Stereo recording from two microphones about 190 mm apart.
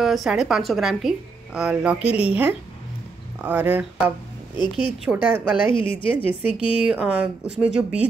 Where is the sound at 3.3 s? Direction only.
10° right (ahead or behind).